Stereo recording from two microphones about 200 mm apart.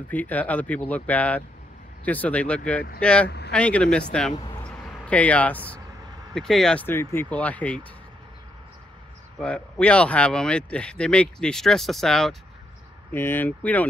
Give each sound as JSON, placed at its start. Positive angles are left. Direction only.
{"t": 0.1, "sound": "speech", "side_deg": 10}
{"t": 3.3, "sound": "a sound", "side_deg": 55}
{"t": 3.5, "sound": "speech", "side_deg": 5}
{"t": 4.6, "sound": "a sound", "side_deg": 5}
{"t": 6.3, "sound": "speech", "side_deg": 0}
{"t": 9.4, "sound": "speech", "side_deg": 5}